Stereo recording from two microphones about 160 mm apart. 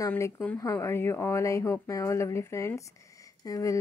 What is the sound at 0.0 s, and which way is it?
Speech, 15° left (ahead or behind).